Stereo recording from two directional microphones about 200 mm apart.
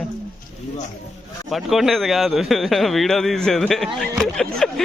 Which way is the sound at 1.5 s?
Centre (ahead or behind).